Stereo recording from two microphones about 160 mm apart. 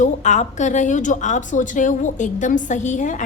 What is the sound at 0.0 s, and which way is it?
A woman's voice, 50° left (ahead or behind).